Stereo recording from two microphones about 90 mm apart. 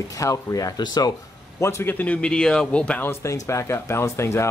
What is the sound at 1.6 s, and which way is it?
Speech, 25° left (ahead or behind).